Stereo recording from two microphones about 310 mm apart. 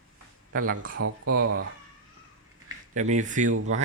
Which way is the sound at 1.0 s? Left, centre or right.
Right.